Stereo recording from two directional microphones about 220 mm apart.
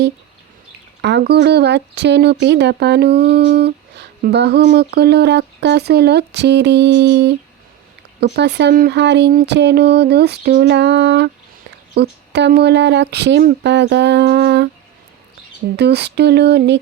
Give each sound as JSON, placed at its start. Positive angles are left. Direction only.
{"t": 1.0, "sound": "speech", "side_deg": -50}
{"t": 15.7, "sound": "speech", "side_deg": -50}